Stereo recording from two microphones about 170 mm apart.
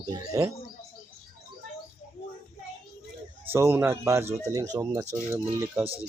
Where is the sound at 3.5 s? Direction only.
15° right (ahead or behind).